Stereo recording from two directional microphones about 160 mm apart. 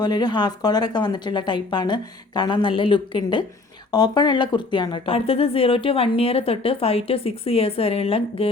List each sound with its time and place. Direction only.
0.0 s a woman's voice: 25° left (ahead or behind)